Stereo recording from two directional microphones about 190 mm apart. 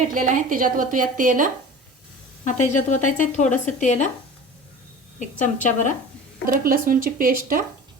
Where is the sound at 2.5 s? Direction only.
40° left (ahead or behind).